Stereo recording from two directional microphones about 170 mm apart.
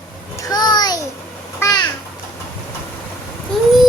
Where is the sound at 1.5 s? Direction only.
15° left (ahead or behind).